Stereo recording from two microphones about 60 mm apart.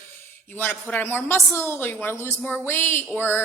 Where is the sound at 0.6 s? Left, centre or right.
Left.